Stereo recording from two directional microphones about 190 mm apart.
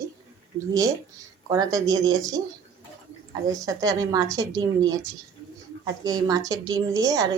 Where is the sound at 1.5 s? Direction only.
20° right (ahead or behind).